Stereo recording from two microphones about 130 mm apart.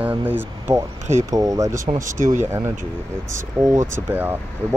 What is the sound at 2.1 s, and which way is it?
Speech, 75° right (ahead or behind).